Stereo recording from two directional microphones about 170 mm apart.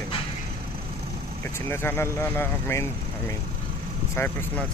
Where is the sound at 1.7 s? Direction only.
15° left (ahead or behind).